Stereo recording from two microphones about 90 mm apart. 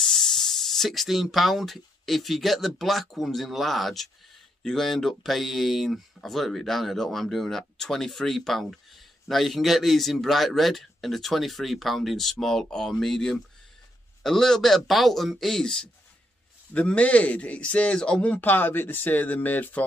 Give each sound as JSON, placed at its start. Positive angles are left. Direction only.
{"t": 0.0, "sound": "speech", "side_deg": 5}